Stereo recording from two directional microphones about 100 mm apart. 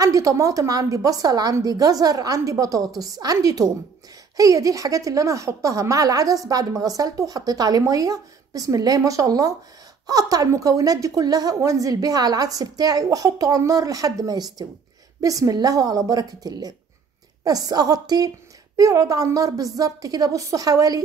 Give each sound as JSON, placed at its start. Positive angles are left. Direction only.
{"t": 0.0, "sound": "a woman's voice", "side_deg": -35}